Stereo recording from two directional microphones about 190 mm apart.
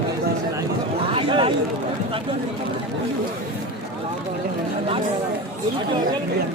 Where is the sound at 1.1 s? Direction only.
30° right (ahead or behind).